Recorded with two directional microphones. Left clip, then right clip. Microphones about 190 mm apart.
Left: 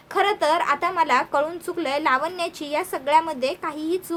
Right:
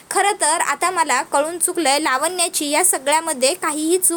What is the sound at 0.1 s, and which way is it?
A woman's voice, 25° right (ahead or behind).